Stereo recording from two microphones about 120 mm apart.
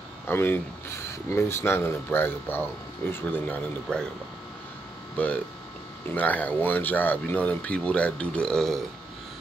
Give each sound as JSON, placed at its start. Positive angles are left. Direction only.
{"t": 0.3, "sound": "speech", "side_deg": 20}
{"t": 5.1, "sound": "speech", "side_deg": 10}